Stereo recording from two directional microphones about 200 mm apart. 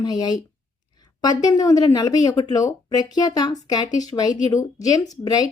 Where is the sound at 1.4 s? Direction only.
20° left (ahead or behind).